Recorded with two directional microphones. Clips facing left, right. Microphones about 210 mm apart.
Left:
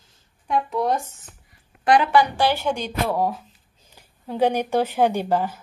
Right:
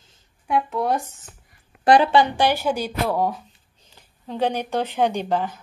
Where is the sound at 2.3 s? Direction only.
15° right (ahead or behind).